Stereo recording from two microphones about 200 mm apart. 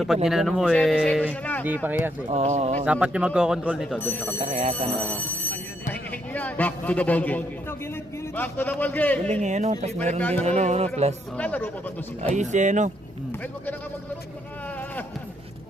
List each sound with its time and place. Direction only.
0.3 s speech: centre (ahead or behind)
1.6 s speech: 10° right (ahead or behind)
2.3 s speech: 35° right (ahead or behind)
2.8 s speech: 5° right (ahead or behind)
4.0 s a man's voice: 10° left (ahead or behind)
4.4 s speech: 35° right (ahead or behind)
4.9 s a man's voice: 10° left (ahead or behind)
9.4 s speech: 35° right (ahead or behind)
10.2 s a man's voice: 5° left (ahead or behind)
10.4 s speech: 35° right (ahead or behind)
11.3 s a man's voice: 5° left (ahead or behind)
12.3 s speech: 35° right (ahead or behind)